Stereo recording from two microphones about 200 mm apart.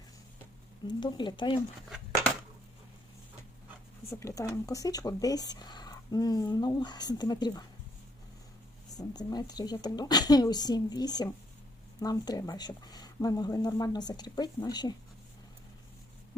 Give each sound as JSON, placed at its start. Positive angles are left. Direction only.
{"t": 0.9, "sound": "speech", "side_deg": 20}
{"t": 4.1, "sound": "speech", "side_deg": 15}
{"t": 9.0, "sound": "speech", "side_deg": 20}